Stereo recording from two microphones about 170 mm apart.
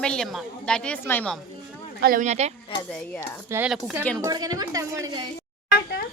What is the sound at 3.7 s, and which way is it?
Speech, 5° right (ahead or behind).